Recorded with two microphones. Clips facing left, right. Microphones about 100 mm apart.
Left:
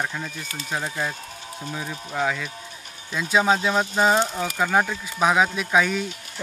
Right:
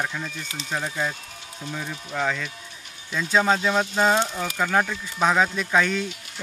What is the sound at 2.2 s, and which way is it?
Speech, 10° left (ahead or behind).